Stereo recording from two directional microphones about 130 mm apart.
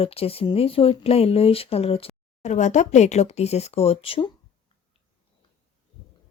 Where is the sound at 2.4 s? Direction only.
65° left (ahead or behind); by 4.3 s 45° left (ahead or behind).